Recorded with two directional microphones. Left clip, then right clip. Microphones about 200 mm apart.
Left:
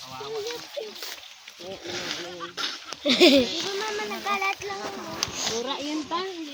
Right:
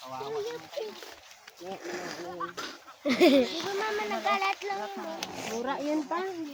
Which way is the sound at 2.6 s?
25° left (ahead or behind).